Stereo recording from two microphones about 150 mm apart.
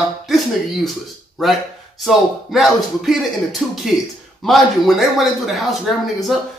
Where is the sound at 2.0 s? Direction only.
Centre (ahead or behind).